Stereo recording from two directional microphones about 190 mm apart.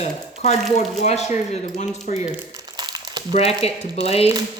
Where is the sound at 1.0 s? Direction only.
35° left (ahead or behind).